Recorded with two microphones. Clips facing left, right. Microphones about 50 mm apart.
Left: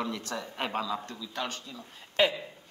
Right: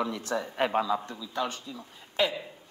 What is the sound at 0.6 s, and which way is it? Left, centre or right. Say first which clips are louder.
Speech: right 5 dB; centre.